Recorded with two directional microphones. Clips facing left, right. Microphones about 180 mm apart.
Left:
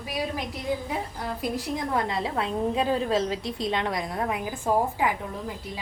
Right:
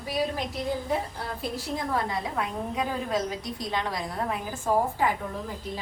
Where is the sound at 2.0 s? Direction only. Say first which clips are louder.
Left 2 dB; 25° left (ahead or behind).